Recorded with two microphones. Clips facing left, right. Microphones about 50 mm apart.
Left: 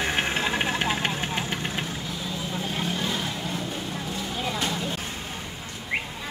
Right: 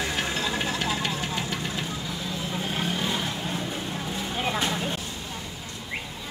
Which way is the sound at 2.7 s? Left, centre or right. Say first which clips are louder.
Right 1 dB; centre.